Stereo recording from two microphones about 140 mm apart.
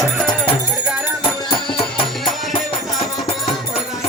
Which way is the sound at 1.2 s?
40° left (ahead or behind).